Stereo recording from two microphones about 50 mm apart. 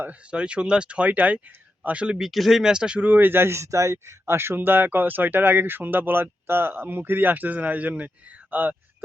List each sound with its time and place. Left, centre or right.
0.1 s speech: right
2.1 s speech: centre
3.0 s speech: right
3.6 s a man's voice: right